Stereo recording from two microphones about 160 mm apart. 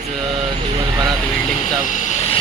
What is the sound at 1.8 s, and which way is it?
Vehicle, 50° left (ahead or behind).